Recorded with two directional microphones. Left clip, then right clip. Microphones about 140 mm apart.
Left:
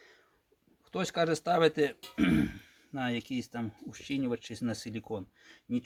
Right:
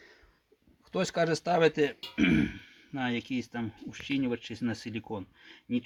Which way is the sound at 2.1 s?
20° left (ahead or behind).